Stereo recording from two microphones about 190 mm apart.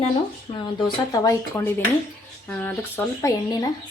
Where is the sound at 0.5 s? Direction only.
25° left (ahead or behind).